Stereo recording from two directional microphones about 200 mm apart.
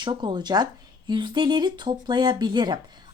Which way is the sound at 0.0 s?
25° right (ahead or behind).